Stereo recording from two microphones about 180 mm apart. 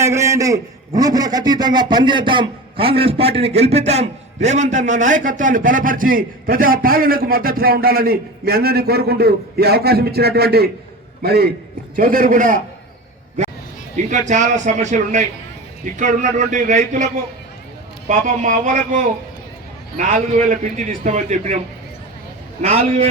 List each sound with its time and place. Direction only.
0.0 s a man's voice: 15° right (ahead or behind); by 11.4 s 60° right (ahead or behind)
11.9 s a man's voice: 50° right (ahead or behind)
13.9 s a man's voice: 45° right (ahead or behind)
18.1 s a man's voice: 45° right (ahead or behind)
22.6 s a man's voice: 35° right (ahead or behind)